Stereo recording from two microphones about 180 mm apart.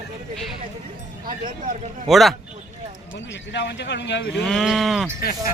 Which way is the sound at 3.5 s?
75° left (ahead or behind).